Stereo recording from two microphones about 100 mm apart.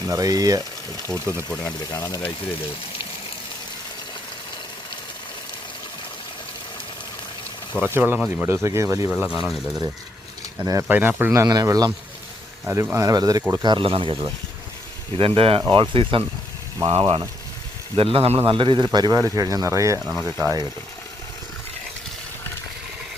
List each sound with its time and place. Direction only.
0.1 s speech: 40° right (ahead or behind)
1.6 s speech: 35° left (ahead or behind)
7.8 s speech: 20° right (ahead or behind)
9.3 s speech: centre (ahead or behind)
10.6 s speech: 35° right (ahead or behind)
10.8 s speech: 20° right (ahead or behind)
11.3 s speech: 35° right (ahead or behind)
12.6 s speech: 25° right (ahead or behind); by 18.3 s 70° right (ahead or behind)
18.4 s speech: 55° right (ahead or behind)
18.9 s speech: 40° right (ahead or behind)